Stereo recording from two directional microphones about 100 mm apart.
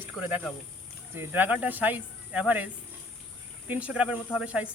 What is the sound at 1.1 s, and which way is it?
Speech, 20° right (ahead or behind).